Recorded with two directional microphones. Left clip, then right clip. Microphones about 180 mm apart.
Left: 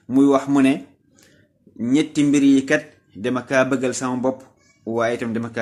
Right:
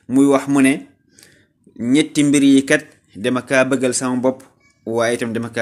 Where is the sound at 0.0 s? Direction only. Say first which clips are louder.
Right 2 dB; 15° right (ahead or behind).